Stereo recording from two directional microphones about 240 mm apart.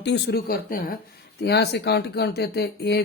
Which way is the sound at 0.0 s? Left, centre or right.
Left.